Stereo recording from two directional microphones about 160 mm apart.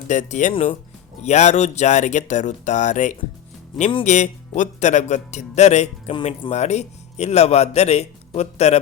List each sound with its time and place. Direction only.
0.1 s a man's voice: 50° left (ahead or behind)